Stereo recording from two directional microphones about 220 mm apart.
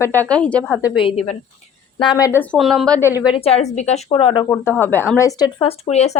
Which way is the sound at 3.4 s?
30° left (ahead or behind).